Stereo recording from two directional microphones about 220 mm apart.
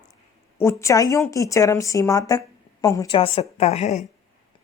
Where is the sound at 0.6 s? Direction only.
10° left (ahead or behind); by 4.0 s 30° left (ahead or behind).